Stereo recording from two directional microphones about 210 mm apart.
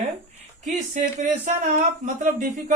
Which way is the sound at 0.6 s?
35° right (ahead or behind).